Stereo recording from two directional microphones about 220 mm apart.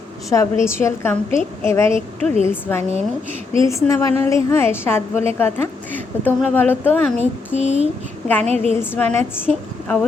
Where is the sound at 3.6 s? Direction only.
15° left (ahead or behind).